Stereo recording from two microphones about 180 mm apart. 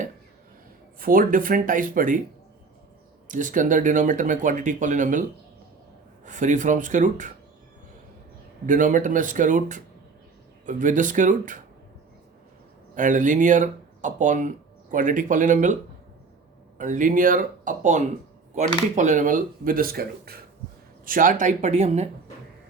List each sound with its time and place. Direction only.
0.9 s speech: 50° right (ahead or behind)
3.2 s speech: 45° right (ahead or behind)
6.2 s speech: 45° right (ahead or behind)
8.6 s speech: 45° right (ahead or behind)
12.9 s speech: 45° right (ahead or behind)